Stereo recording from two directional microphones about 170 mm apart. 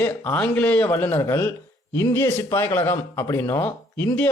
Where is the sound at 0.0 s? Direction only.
10° left (ahead or behind).